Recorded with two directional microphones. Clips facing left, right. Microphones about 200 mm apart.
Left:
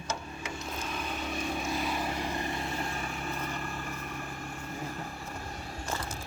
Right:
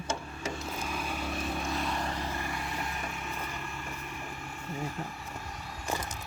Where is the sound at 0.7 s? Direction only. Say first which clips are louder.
Right 1 dB; 5° right (ahead or behind); by 3.4 s 40° left (ahead or behind).